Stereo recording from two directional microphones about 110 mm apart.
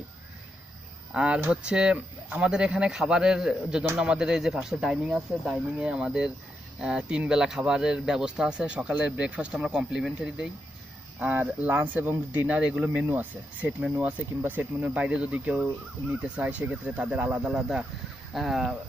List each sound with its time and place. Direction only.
1.1 s speech: 10° right (ahead or behind)